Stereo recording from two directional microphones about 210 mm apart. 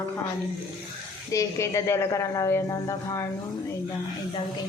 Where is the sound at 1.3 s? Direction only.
15° left (ahead or behind).